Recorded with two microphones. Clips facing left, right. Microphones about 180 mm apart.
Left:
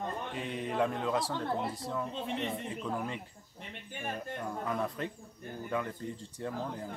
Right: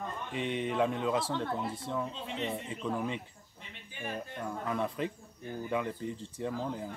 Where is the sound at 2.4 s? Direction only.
Centre (ahead or behind).